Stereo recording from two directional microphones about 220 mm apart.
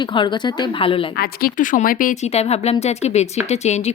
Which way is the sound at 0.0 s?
20° left (ahead or behind).